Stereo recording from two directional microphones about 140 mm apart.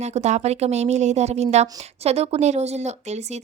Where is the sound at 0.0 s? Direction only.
55° right (ahead or behind).